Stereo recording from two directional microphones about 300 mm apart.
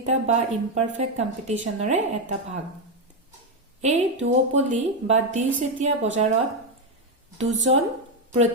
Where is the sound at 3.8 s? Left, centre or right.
Right.